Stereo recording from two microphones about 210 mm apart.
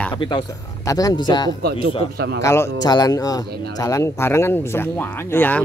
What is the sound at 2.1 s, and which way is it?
Speech, 50° right (ahead or behind).